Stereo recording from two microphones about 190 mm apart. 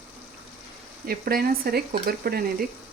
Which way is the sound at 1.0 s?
50° right (ahead or behind).